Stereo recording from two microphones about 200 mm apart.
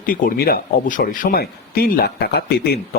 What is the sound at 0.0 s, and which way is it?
Speech, 45° left (ahead or behind).